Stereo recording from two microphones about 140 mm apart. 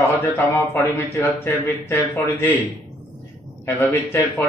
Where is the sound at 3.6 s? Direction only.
15° left (ahead or behind).